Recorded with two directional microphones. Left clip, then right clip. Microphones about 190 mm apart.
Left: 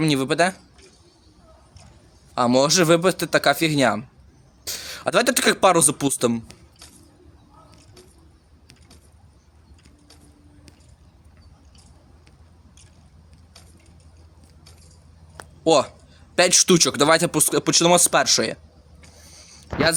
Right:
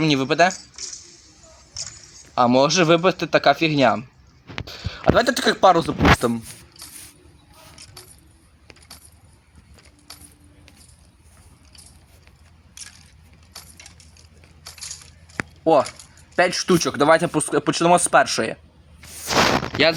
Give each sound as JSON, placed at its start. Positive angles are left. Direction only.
{"t": 0.0, "sound": "speech", "side_deg": 5}
{"t": 2.3, "sound": "speech", "side_deg": 5}
{"t": 5.5, "sound": "speech", "side_deg": 25}
{"t": 6.8, "sound": "a sound", "side_deg": 0}
{"t": 7.8, "sound": "keys jangling", "side_deg": 0}
{"t": 10.1, "sound": "a sound", "side_deg": 0}
{"t": 12.7, "sound": "crushing", "side_deg": 0}
{"t": 13.5, "sound": "keys jangling", "side_deg": 0}
{"t": 14.7, "sound": "crushing", "side_deg": 0}
{"t": 15.6, "sound": "speech", "side_deg": 10}
{"t": 19.7, "sound": "speech", "side_deg": 0}